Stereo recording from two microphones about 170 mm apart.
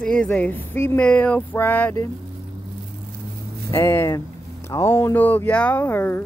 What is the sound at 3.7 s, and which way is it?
Speech, 15° left (ahead or behind).